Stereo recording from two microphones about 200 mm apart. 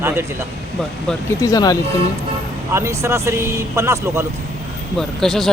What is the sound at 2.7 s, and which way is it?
Speech, 15° right (ahead or behind).